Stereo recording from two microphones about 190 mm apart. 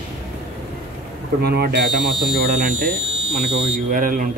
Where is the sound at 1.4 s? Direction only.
55° right (ahead or behind).